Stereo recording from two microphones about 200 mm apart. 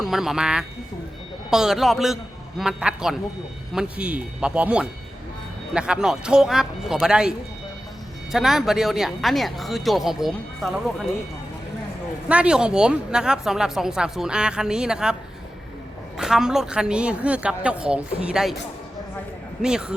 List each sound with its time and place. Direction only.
0.0 s speech: centre (ahead or behind)
12.3 s speech: 5° right (ahead or behind)
16.1 s speech: 5° right (ahead or behind)
19.6 s speech: 5° right (ahead or behind)